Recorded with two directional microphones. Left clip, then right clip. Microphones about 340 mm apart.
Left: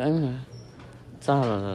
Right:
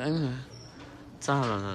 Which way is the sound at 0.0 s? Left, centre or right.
Centre.